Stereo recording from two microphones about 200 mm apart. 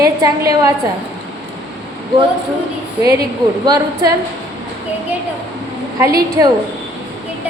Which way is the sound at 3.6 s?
20° right (ahead or behind).